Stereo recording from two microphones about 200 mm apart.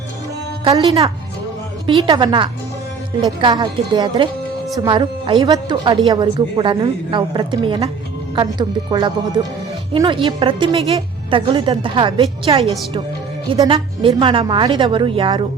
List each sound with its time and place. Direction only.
0.6 s speech: 25° right (ahead or behind)